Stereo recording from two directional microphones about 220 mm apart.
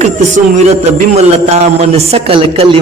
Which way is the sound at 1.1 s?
30° right (ahead or behind).